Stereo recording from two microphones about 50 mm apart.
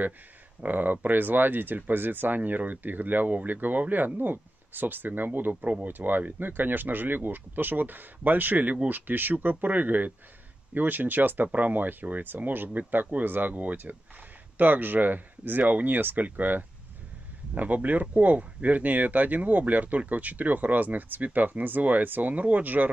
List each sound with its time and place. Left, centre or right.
0.6 s speech: right